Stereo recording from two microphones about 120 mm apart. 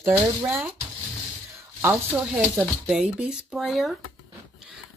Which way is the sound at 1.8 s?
15° right (ahead or behind).